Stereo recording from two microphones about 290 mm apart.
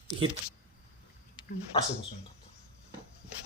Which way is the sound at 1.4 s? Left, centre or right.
Centre.